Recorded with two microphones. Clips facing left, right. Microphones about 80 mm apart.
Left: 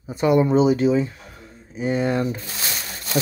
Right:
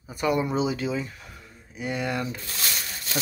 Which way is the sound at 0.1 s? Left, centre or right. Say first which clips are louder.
Left 8 dB; left.